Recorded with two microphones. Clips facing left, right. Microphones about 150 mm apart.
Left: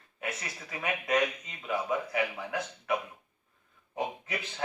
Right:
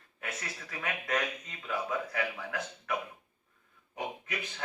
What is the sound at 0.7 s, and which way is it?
Speech, 20° left (ahead or behind).